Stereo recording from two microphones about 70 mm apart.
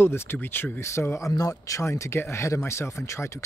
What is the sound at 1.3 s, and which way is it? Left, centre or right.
Speech, left.